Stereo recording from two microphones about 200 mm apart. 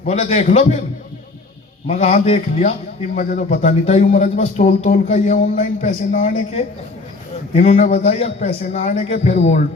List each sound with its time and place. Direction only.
0.0 s speech: 35° left (ahead or behind)
1.9 s speech: 40° left (ahead or behind)